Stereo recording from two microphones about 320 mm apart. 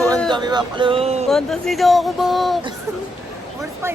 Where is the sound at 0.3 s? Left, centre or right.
Centre.